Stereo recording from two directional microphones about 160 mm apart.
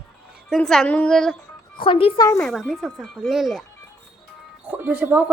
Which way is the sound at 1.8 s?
35° left (ahead or behind).